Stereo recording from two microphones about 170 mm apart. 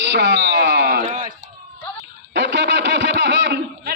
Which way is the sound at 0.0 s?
90° right.